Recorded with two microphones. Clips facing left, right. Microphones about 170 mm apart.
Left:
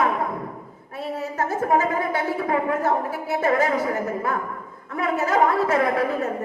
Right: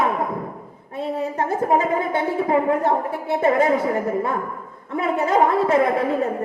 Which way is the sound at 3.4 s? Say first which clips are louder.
Right 3 dB; 25° right (ahead or behind).